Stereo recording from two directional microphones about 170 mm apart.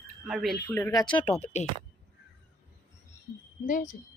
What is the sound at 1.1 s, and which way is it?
Speech, 30° left (ahead or behind).